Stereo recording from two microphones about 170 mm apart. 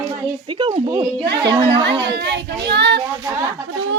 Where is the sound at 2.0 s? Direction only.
80° right.